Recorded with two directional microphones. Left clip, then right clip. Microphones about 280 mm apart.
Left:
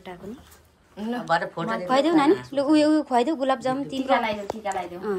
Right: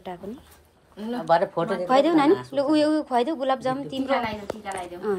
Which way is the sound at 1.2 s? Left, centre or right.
Centre.